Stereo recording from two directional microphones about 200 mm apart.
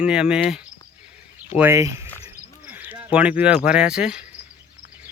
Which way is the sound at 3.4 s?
5° right (ahead or behind).